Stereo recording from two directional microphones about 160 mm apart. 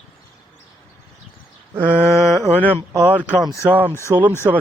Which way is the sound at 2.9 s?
20° right (ahead or behind).